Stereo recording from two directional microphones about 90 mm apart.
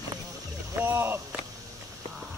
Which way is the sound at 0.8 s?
25° right (ahead or behind).